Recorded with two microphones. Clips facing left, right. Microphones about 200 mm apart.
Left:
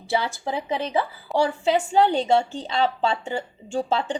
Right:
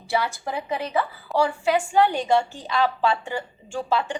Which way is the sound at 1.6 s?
25° left (ahead or behind).